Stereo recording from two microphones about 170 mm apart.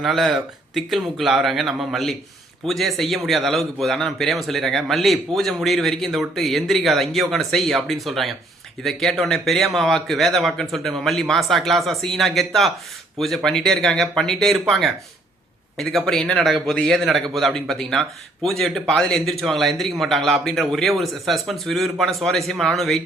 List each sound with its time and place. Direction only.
0.0 s a man's voice: centre (ahead or behind)